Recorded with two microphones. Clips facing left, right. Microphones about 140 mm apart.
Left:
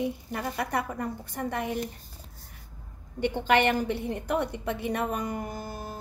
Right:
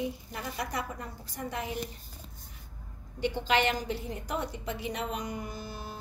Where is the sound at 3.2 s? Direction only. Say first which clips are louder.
Left 4 dB; 55° left (ahead or behind).